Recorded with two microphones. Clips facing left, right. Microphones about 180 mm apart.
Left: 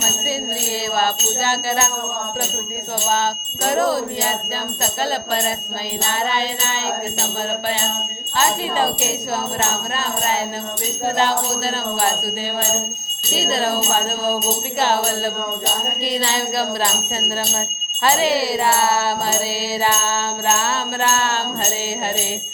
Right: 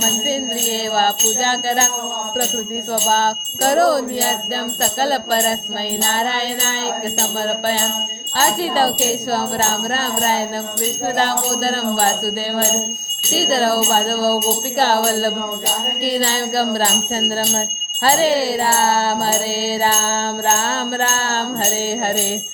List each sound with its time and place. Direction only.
0.7 s music: 35° right (ahead or behind)
3.1 s music: 35° right (ahead or behind)
8.4 s music: 35° right (ahead or behind)